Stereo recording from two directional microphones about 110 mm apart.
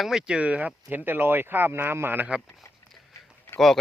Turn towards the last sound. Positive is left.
turn(degrees=0)  # may be behind; listen again after turning